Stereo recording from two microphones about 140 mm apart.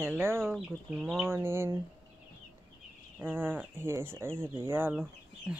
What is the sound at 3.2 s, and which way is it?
Insect, 15° right (ahead or behind).